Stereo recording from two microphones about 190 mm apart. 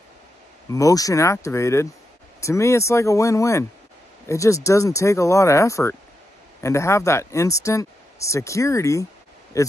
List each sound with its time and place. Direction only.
0.7 s speech: 15° left (ahead or behind)